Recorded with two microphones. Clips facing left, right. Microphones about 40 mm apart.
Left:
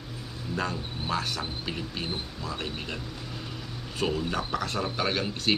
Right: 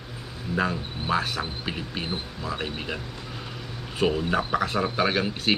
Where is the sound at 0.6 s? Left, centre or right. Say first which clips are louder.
Right 5 dB; centre.